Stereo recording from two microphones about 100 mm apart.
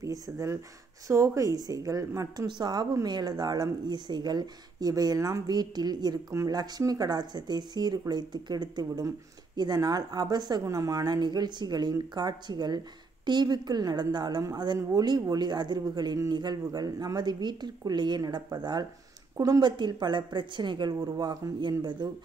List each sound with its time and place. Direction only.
0.0 s a woman's voice: 30° right (ahead or behind); by 22.1 s 50° right (ahead or behind)